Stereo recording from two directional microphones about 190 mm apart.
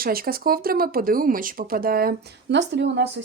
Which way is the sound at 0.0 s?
50° right (ahead or behind).